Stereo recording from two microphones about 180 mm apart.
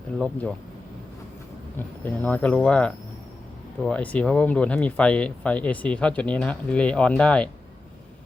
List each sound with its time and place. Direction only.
0.2 s speech: 5° left (ahead or behind)
2.0 s speech: 10° left (ahead or behind)